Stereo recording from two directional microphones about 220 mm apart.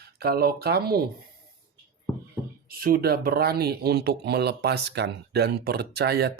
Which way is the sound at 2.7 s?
40° right (ahead or behind).